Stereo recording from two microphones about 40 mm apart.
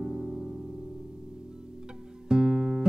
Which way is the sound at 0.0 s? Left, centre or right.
Centre.